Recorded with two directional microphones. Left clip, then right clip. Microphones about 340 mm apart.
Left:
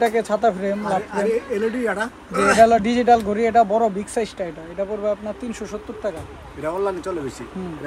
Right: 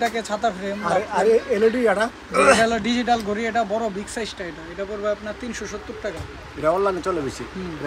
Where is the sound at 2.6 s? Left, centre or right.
Centre.